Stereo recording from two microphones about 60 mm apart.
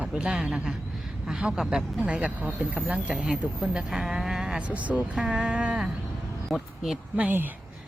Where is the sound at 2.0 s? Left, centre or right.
Right; by 4.6 s centre.